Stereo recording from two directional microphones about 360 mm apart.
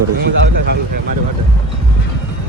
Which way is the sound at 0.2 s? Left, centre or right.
Right.